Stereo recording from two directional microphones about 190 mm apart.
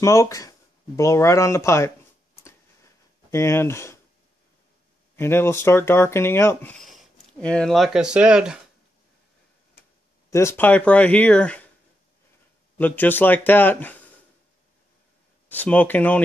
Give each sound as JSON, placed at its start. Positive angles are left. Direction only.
{"t": 0.0, "sound": "speech", "side_deg": 15}
{"t": 3.3, "sound": "speech", "side_deg": 15}
{"t": 5.1, "sound": "speech", "side_deg": 10}
{"t": 10.3, "sound": "speech", "side_deg": 15}
{"t": 12.7, "sound": "speech", "side_deg": 10}
{"t": 15.4, "sound": "speech", "side_deg": 10}